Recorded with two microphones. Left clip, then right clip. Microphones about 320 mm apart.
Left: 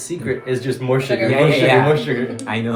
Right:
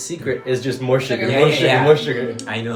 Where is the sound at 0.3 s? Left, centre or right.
Centre.